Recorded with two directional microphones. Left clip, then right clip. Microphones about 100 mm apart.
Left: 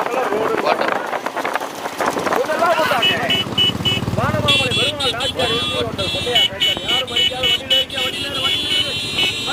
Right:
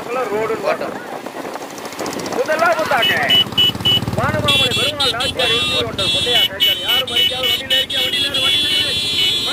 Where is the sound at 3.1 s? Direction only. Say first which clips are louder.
Right 4 dB; 50° right (ahead or behind).